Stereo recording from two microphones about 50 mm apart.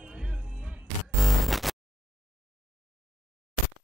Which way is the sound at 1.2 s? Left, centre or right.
Centre.